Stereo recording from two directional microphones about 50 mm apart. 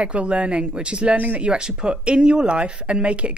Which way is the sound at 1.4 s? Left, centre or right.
Centre.